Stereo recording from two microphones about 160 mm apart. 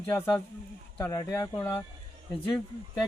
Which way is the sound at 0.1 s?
15° left (ahead or behind).